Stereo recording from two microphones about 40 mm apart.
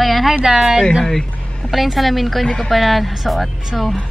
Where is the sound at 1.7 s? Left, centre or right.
Centre.